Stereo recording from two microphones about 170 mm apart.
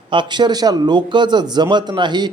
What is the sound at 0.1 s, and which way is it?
A man's voice, 25° right (ahead or behind).